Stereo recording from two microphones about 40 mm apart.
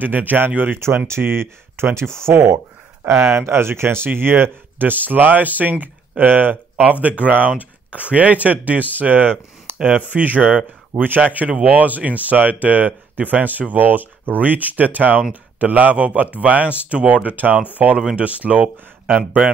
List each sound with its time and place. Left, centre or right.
0.0 s speech: right
0.7 s speech: right